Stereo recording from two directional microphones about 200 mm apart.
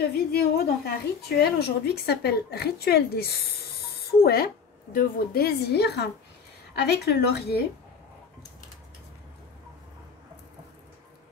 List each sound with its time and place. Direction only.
0.0 s a woman's voice: 50° left (ahead or behind)